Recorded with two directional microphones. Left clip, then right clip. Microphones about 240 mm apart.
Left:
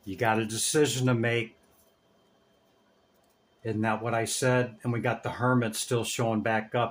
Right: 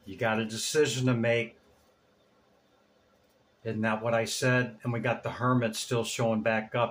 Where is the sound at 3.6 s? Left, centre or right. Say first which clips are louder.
Even; left.